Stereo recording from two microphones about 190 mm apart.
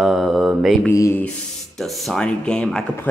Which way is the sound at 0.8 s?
15° left (ahead or behind).